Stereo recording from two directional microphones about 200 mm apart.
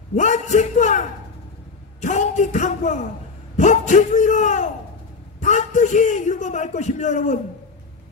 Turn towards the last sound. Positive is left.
turn(degrees=35)  # may be behind; listen again after turning